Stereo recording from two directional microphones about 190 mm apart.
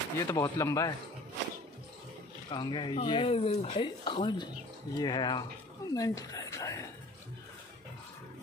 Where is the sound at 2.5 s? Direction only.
25° left (ahead or behind).